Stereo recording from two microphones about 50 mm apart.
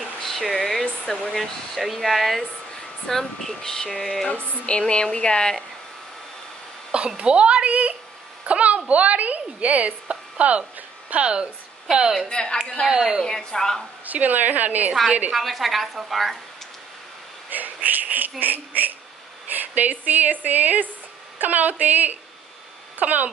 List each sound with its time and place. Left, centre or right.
0.2 s a sound: centre
0.8 s air conditioning: centre
1.3 s speech: centre
4.6 s speech: left
6.9 s a woman's voice: right
12.3 s speech: centre
14.0 s a woman's voice: right
15.3 s speech: centre
17.5 s a woman's voice: right